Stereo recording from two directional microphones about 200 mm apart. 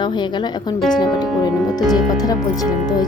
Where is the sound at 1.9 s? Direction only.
20° left (ahead or behind).